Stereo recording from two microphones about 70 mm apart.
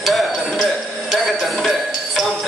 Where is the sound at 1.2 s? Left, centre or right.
Centre.